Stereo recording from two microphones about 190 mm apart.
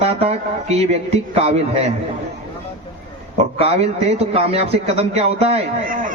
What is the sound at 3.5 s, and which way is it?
A man's voice, 35° right (ahead or behind).